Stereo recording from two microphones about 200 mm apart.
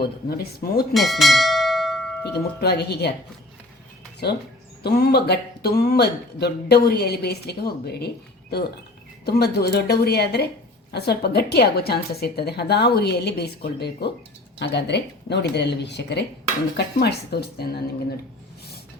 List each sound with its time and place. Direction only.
0.0 s speech: 50° left (ahead or behind)
0.9 s bell: centre (ahead or behind)
2.6 s speech: 55° left (ahead or behind)
4.2 s a woman's voice: 55° left (ahead or behind)